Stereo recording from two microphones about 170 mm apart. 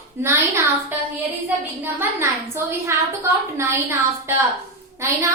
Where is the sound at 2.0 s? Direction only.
15° right (ahead or behind).